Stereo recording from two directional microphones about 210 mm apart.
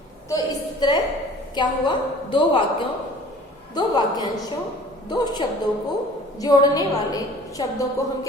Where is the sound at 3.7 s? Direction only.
20° left (ahead or behind).